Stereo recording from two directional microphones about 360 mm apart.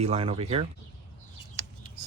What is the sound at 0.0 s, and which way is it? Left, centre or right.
Cutlery, centre.